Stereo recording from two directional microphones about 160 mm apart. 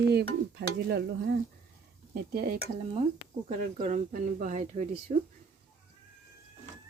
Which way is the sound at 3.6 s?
50° right (ahead or behind).